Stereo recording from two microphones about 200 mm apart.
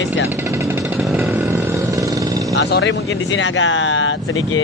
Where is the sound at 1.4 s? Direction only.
15° right (ahead or behind).